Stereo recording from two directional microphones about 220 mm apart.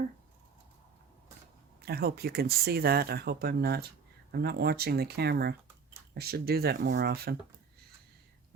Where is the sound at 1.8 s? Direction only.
45° right (ahead or behind).